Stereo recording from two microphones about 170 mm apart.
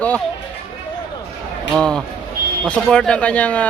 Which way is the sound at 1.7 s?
5° left (ahead or behind).